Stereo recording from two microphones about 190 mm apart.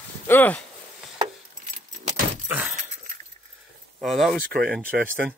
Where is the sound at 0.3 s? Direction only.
10° left (ahead or behind).